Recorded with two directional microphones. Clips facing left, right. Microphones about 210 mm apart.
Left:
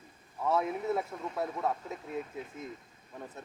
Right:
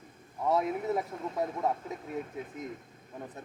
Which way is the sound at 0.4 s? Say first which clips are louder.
Right 1 dB; 15° right (ahead or behind).